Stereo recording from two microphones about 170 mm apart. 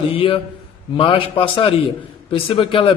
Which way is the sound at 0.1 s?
30° left (ahead or behind).